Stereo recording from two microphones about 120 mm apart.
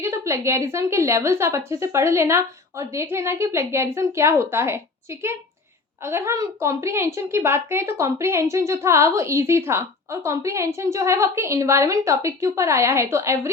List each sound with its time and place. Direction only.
0.0 s a woman's voice: 20° right (ahead or behind)
6.0 s a woman's voice: 20° right (ahead or behind)